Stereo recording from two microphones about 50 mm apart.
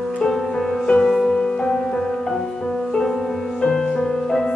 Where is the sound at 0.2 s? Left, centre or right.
Centre.